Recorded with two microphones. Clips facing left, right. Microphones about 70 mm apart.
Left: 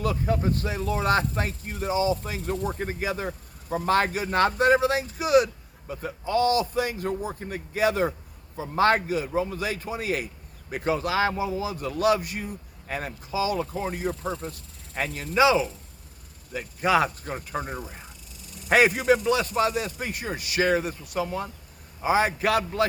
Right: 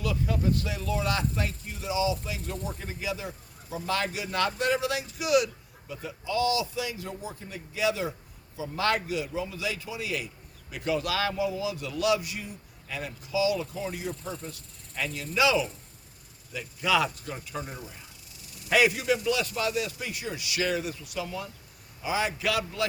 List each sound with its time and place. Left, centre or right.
0.0 s a man's voice: left
16.5 s speech: left